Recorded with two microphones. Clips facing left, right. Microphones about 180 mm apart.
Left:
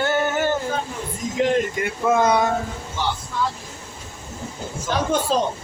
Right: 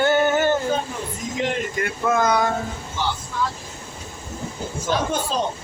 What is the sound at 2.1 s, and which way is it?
Speech, 25° left (ahead or behind).